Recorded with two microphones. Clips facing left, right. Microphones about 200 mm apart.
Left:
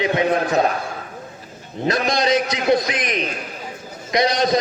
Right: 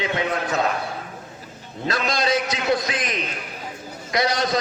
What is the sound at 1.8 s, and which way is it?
A man's voice, 20° left (ahead or behind).